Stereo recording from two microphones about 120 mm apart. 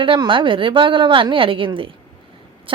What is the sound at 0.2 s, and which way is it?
A woman's voice, 45° right (ahead or behind).